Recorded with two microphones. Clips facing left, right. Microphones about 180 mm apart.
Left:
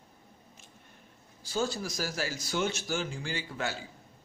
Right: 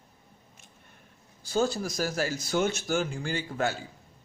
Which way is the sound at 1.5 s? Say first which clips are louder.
Right 5 dB; 45° right (ahead or behind).